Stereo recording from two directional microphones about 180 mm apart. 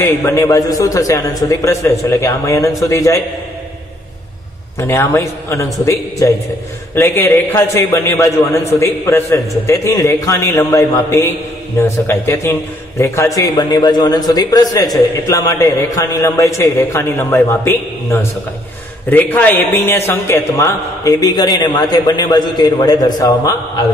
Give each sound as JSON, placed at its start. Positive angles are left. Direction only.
{"t": 0.0, "sound": "a man's voice", "side_deg": 15}
{"t": 4.7, "sound": "a man's voice", "side_deg": 15}